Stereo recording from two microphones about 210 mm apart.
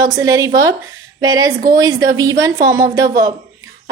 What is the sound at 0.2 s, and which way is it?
A woman's voice, 15° right (ahead or behind).